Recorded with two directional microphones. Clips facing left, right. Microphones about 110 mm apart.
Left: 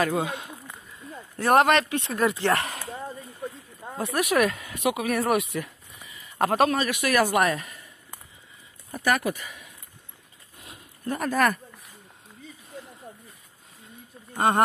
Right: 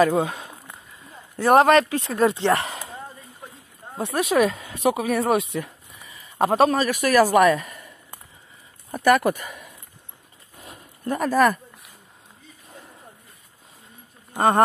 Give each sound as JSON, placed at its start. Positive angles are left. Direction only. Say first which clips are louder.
{"t": 0.1, "sound": "a man's voice", "louder": "right 4 dB", "side_deg": -35}
{"t": 4.0, "sound": "speech", "louder": "right 3 dB", "side_deg": -30}
{"t": 6.0, "sound": "a sound", "louder": "right 1 dB", "side_deg": -40}
{"t": 6.4, "sound": "a man's voice", "louder": "right 4 dB", "side_deg": -35}
{"t": 8.9, "sound": "speech", "louder": "right 7 dB", "side_deg": -50}
{"t": 10.6, "sound": "a sound", "louder": "right 3 dB", "side_deg": -45}
{"t": 11.3, "sound": "speech", "louder": "right 5 dB", "side_deg": -30}